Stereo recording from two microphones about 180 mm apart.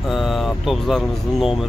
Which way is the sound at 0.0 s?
Centre (ahead or behind).